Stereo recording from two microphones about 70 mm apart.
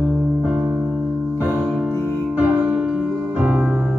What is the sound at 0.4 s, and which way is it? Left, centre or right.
Music, centre.